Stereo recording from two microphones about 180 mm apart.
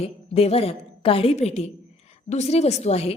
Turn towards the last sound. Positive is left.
turn(degrees=35)  # may be behind; listen again after turning